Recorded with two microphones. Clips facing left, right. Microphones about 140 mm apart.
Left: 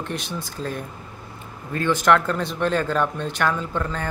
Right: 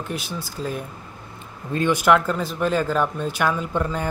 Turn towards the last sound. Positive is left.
turn(degrees=-10)  # may be behind; listen again after turning